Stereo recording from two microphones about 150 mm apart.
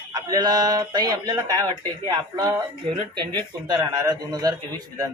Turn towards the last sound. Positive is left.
turn(degrees=-25)  # may be behind; listen again after turning